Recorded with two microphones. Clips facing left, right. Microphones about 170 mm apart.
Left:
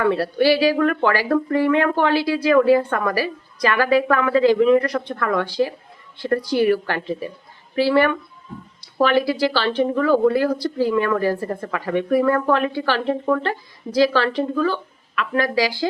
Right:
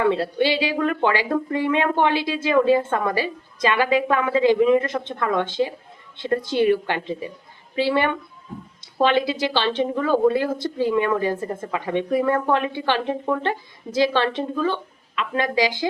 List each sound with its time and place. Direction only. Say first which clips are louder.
0.0 s speech: left 2 dB; 20° right (ahead or behind)